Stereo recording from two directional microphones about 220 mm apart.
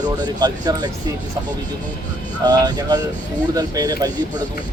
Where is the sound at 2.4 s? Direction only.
20° right (ahead or behind).